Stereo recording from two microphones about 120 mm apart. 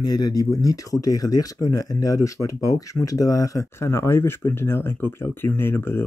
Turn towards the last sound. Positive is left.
turn(degrees=20)  # may be behind; listen again after turning